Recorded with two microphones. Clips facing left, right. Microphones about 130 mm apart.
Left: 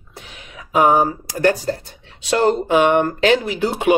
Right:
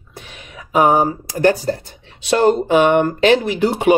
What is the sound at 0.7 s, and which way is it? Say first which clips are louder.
Speech: right 1 dB; 35° right (ahead or behind).